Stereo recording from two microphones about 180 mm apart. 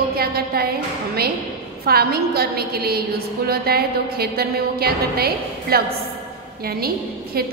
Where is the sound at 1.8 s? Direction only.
60° right (ahead or behind).